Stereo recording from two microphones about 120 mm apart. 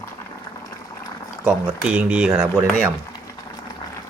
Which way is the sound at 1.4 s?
10° right (ahead or behind).